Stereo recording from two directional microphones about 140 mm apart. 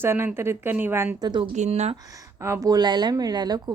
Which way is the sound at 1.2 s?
30° right (ahead or behind).